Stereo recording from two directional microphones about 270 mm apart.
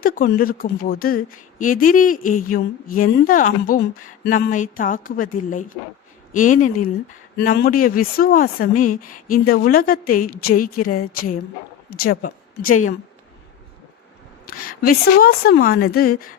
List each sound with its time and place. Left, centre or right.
0.0 s a woman's voice: left
14.4 s a woman's voice: left